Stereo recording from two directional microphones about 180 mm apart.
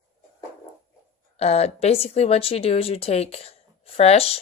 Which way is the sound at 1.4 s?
35° left (ahead or behind).